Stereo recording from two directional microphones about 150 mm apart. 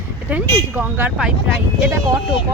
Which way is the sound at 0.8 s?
10° right (ahead or behind).